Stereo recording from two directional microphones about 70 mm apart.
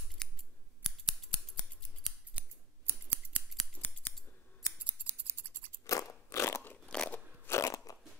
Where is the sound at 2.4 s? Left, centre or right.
Centre.